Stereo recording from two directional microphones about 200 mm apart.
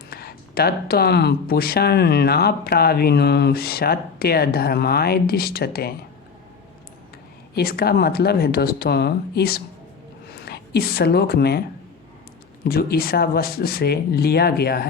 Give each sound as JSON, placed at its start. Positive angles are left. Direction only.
{"t": 0.1, "sound": "speech", "side_deg": 50}
{"t": 7.5, "sound": "a woman's voice", "side_deg": 50}
{"t": 12.6, "sound": "speech", "side_deg": 50}